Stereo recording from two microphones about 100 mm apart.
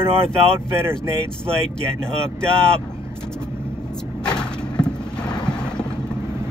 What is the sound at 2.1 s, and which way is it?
Speech, 10° left (ahead or behind).